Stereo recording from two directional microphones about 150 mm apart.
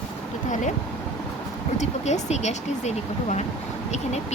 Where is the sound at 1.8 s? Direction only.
50° left (ahead or behind).